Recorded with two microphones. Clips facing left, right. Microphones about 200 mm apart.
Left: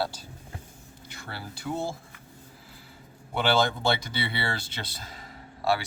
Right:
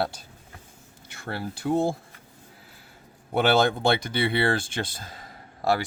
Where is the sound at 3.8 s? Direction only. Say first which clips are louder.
Right 5 dB; 55° right (ahead or behind).